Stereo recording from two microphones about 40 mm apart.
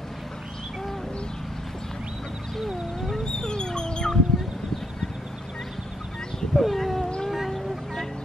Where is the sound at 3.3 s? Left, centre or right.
Centre.